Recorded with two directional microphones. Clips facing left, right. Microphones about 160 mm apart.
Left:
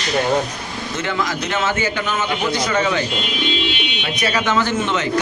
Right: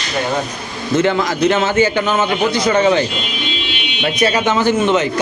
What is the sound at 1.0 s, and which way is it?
A man's voice, 30° right (ahead or behind).